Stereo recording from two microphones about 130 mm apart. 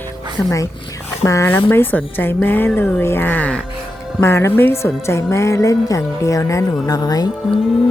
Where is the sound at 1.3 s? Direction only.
20° left (ahead or behind).